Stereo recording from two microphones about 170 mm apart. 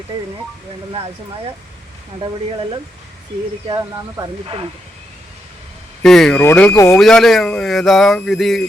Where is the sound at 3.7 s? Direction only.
25° right (ahead or behind).